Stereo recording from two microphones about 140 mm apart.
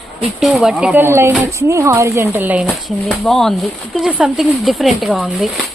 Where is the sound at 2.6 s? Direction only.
Centre (ahead or behind).